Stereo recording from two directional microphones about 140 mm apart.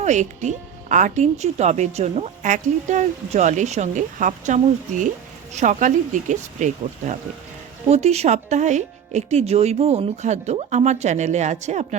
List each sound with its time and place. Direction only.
0.0 s speech: 60° right (ahead or behind)
7.9 s speech: 50° right (ahead or behind)